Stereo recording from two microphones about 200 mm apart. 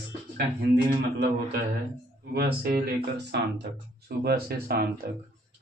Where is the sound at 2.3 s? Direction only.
50° right (ahead or behind).